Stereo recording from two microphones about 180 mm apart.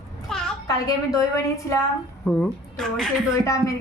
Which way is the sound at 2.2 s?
5° left (ahead or behind).